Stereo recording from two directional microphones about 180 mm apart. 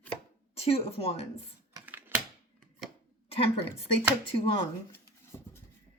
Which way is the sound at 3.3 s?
30° left (ahead or behind).